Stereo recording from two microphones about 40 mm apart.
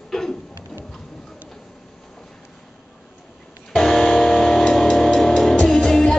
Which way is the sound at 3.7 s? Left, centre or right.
Centre.